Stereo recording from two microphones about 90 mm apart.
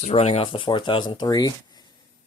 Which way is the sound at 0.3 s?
75° left (ahead or behind).